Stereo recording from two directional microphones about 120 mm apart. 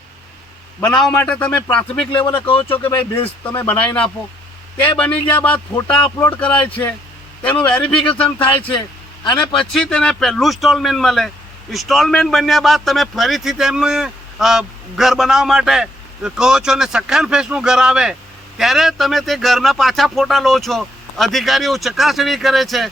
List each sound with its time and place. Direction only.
0.8 s speech: 5° left (ahead or behind)
2.2 s speech: 45° left (ahead or behind)
2.6 s speech: 15° left (ahead or behind)
9.2 s a man's voice: 40° left (ahead or behind)
9.7 s a man's voice: 5° left (ahead or behind)